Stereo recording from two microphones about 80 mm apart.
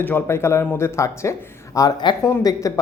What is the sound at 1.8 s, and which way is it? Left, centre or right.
Speech, left.